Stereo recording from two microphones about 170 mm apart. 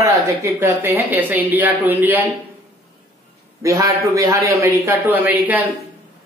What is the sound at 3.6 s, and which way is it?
A man's voice, 20° right (ahead or behind).